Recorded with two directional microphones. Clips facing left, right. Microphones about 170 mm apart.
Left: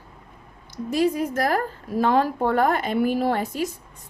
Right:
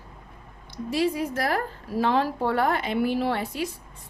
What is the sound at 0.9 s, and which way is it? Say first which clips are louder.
Speech: left 3 dB; 45° left (ahead or behind).